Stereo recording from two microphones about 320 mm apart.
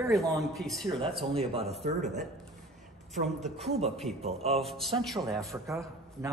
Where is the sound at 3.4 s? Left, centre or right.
Centre.